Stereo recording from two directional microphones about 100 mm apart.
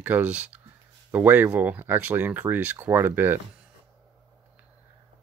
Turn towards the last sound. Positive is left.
turn(degrees=-20)  # may be behind; listen again after turning